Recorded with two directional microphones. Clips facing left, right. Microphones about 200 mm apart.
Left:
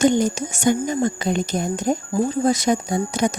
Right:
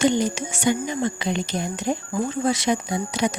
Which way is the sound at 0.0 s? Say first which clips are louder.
Left 3 dB; 45° left (ahead or behind).